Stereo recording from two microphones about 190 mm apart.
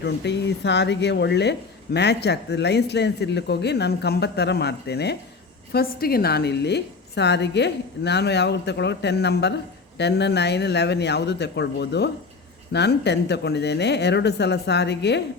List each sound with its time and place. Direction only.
0.0 s speech: 65° left (ahead or behind)